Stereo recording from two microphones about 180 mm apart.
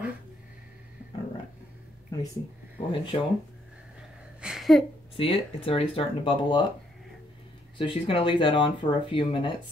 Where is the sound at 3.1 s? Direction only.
35° left (ahead or behind).